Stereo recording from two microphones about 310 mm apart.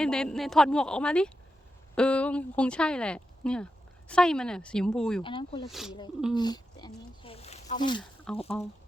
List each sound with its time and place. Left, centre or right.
0.0 s speech: centre
5.2 s speech: centre
5.6 s speech: centre
6.3 s a sound: centre
8.3 s speech: centre